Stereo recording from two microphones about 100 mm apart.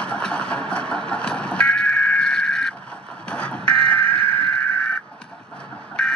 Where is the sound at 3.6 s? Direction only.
20° left (ahead or behind).